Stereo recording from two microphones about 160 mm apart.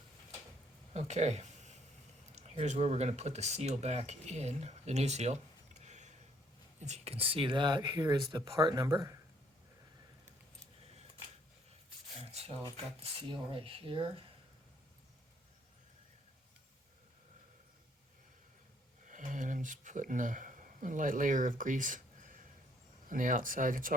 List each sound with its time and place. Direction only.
0.9 s a sound: 45° right (ahead or behind)
2.3 s speech: 45° right (ahead or behind); by 9.1 s 25° right (ahead or behind)
12.2 s rub: 40° right (ahead or behind)
12.7 s speech: 40° right (ahead or behind)
19.0 s a sound: 55° right (ahead or behind)
23.0 s speech: 55° right (ahead or behind)